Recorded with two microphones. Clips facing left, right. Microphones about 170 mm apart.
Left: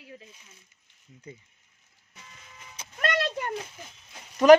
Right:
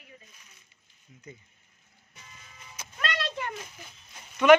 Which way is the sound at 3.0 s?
45° left (ahead or behind).